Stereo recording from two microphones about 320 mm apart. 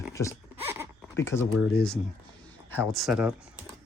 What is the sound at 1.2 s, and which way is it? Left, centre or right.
Speech, centre.